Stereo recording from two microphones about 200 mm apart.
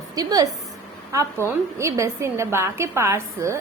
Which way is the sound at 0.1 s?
20° right (ahead or behind).